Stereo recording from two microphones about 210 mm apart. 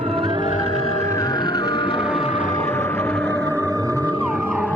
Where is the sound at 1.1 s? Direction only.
15° left (ahead or behind).